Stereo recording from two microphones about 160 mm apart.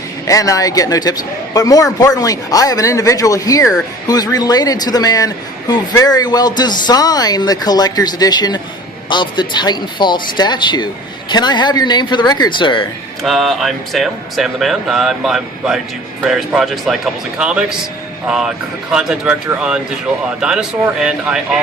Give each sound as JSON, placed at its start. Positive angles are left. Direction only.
{"t": 0.3, "sound": "a man's voice", "side_deg": 20}
{"t": 13.2, "sound": "speech", "side_deg": 0}